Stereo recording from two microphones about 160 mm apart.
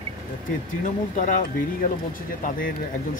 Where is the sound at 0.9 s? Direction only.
55° left (ahead or behind).